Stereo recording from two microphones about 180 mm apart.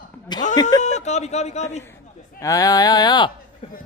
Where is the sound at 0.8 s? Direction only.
40° left (ahead or behind).